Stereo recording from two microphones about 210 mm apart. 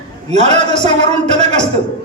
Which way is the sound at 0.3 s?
30° right (ahead or behind).